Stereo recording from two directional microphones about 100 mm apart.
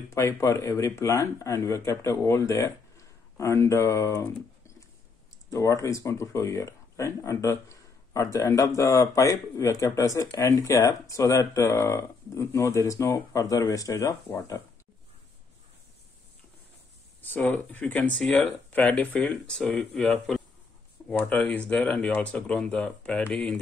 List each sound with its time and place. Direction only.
0.1 s speech: 30° left (ahead or behind)
4.2 s a sound: 30° left (ahead or behind)
5.5 s speech: 30° left (ahead or behind)
17.2 s speech: 20° left (ahead or behind); by 20.4 s 5° left (ahead or behind)
21.2 s speech: 15° left (ahead or behind)